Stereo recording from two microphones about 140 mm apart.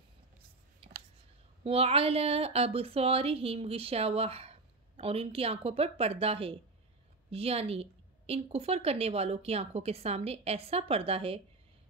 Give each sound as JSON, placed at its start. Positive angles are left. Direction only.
{"t": 0.8, "sound": "whispering", "side_deg": -45}
{"t": 1.6, "sound": "speech", "side_deg": -45}